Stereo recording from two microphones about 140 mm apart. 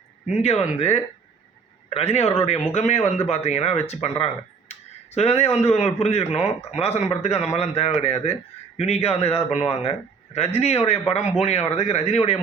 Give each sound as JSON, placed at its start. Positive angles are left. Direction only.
{"t": 0.4, "sound": "a man's voice", "side_deg": 50}